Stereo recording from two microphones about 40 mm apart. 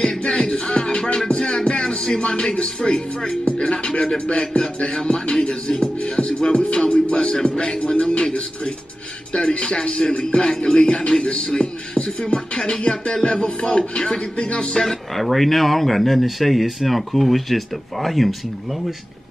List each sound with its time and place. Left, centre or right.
0.0 s music: left
15.1 s speech: centre